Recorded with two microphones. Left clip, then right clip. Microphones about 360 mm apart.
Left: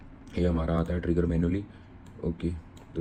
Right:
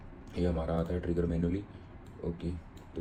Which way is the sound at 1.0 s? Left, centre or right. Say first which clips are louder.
Left 5 dB; left.